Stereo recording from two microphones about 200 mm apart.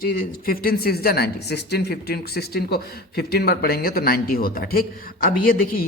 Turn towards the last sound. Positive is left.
turn(degrees=45)  # may be behind; listen again after turning